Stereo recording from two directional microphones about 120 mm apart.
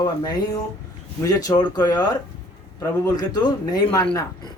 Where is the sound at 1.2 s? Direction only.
30° left (ahead or behind).